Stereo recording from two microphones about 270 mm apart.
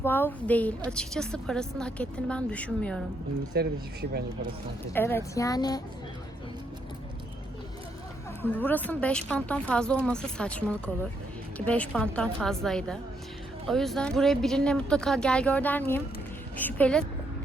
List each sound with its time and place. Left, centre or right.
0.0 s a woman's voice: centre
3.6 s speech: right
4.9 s speech: centre
8.4 s a woman's voice: centre